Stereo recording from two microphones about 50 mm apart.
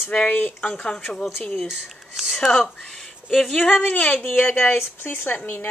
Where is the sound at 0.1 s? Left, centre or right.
Left.